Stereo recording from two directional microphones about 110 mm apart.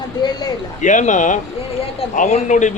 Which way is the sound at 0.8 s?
90° left.